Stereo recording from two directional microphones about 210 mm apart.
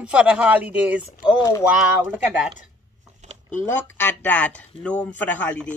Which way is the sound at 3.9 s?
10° left (ahead or behind).